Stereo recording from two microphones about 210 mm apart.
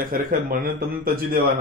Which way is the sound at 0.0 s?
45° right (ahead or behind).